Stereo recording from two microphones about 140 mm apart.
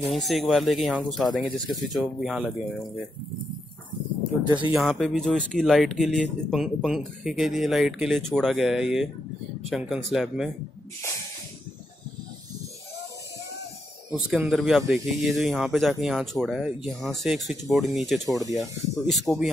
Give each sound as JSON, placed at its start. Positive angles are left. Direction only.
{"t": 0.0, "sound": "speech", "side_deg": 0}
{"t": 4.7, "sound": "speech", "side_deg": 0}
{"t": 14.1, "sound": "speech", "side_deg": -5}